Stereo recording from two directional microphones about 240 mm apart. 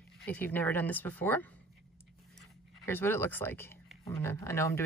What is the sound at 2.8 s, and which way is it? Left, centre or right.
Speech, centre.